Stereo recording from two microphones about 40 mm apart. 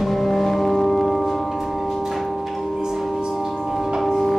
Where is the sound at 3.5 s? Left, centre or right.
Centre.